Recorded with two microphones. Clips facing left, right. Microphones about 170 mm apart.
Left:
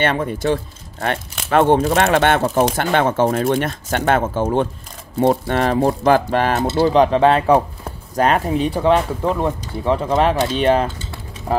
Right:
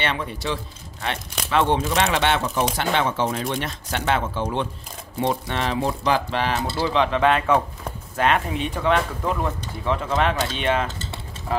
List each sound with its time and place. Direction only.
0.0 s speech: 50° left (ahead or behind)